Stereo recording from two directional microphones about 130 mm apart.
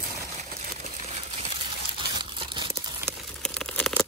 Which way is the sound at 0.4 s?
60° right (ahead or behind).